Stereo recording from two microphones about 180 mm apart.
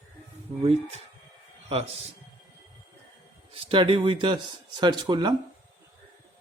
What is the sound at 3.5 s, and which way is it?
A man's voice, 30° right (ahead or behind).